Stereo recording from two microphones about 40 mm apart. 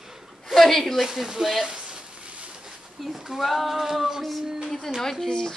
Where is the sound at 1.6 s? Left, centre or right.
Centre.